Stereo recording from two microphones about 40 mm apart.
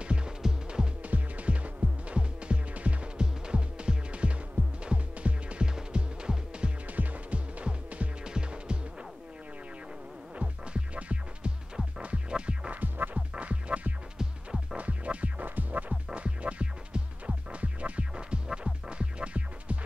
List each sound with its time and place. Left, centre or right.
0.0 s throbbing: right
0.4 s music: centre
1.0 s music: right
6.9 s music: right
8.2 s throbbing: right
10.3 s music: right
12.8 s music: right
13.1 s music: right
14.1 s music: centre
14.8 s music: right
16.2 s music: right